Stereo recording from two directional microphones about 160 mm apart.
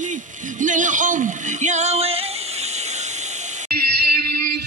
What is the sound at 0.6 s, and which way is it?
Speech, 50° right (ahead or behind).